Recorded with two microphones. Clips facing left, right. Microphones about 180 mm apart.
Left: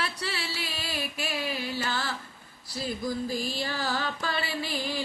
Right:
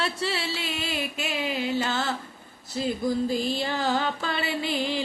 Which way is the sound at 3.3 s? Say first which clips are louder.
Right 5 dB; 20° right (ahead or behind).